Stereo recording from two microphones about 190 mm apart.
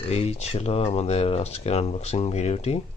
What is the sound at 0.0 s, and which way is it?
Speech, 35° left (ahead or behind).